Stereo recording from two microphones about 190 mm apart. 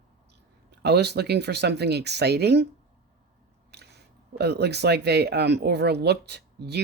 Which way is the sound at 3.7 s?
60° right (ahead or behind).